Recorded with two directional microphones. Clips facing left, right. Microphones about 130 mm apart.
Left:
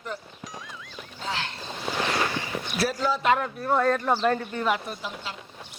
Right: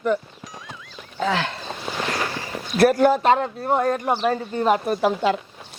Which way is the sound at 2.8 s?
55° right (ahead or behind).